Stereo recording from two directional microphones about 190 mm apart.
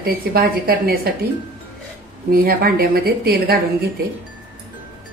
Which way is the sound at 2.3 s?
50° right (ahead or behind).